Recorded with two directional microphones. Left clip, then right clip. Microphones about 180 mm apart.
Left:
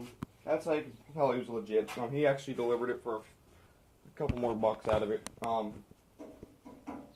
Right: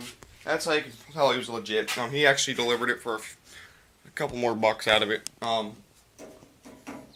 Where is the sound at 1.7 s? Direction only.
20° right (ahead or behind).